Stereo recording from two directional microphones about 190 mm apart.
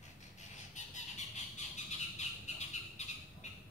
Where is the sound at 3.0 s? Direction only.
35° left (ahead or behind).